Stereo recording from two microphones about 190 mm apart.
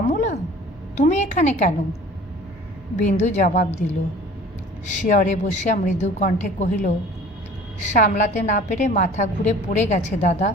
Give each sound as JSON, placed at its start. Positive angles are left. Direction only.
{"t": 0.1, "sound": "a sound", "side_deg": 40}
{"t": 0.9, "sound": "a woman's voice", "side_deg": 40}
{"t": 2.9, "sound": "a woman's voice", "side_deg": 40}